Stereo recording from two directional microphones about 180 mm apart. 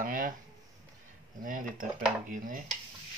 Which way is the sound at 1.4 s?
50° right (ahead or behind).